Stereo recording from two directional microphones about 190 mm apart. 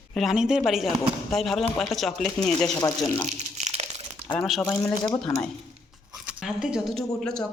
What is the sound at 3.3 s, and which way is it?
Crunch, 35° right (ahead or behind).